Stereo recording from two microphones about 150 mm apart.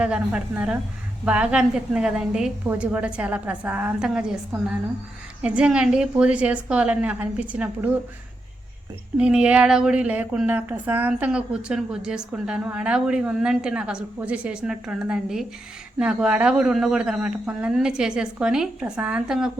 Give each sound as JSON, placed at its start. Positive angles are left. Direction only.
{"t": 0.0, "sound": "speech", "side_deg": -5}
{"t": 5.4, "sound": "speech", "side_deg": -5}
{"t": 9.1, "sound": "speech", "side_deg": -5}